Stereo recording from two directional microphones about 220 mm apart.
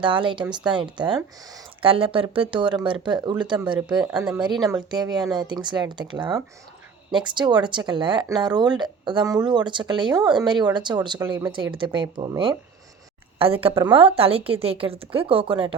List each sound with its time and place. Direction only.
0.0 s speech: 20° right (ahead or behind)
4.0 s speech: 5° right (ahead or behind)
4.9 s speech: 20° right (ahead or behind)